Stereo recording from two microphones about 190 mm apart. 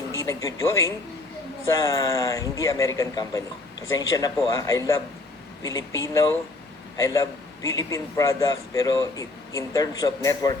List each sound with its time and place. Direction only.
0.1 s a man's voice: 15° left (ahead or behind)